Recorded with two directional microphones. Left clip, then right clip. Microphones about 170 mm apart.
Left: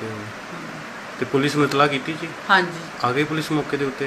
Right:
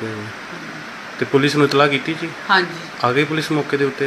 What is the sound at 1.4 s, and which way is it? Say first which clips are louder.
Speech: right 4 dB; 40° right (ahead or behind).